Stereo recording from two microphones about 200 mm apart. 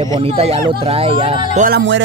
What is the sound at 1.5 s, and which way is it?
Speech, 45° right (ahead or behind).